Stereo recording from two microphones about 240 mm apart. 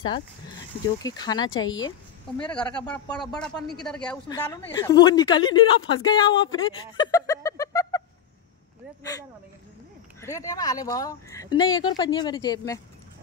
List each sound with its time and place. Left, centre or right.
0.8 s a woman's voice: centre
2.3 s a woman's voice: centre
10.2 s a woman's voice: centre